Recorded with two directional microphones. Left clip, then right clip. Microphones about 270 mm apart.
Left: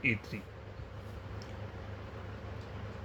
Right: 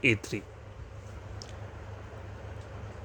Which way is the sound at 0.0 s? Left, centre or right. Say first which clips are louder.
Right 6 dB; right.